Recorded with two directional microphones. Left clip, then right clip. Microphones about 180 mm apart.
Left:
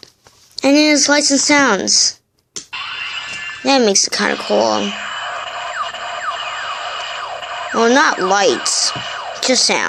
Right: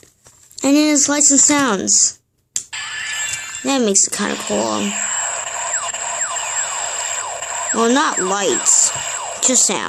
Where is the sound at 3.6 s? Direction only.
30° right (ahead or behind).